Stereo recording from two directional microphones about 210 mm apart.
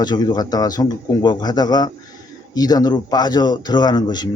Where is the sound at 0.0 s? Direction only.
20° left (ahead or behind).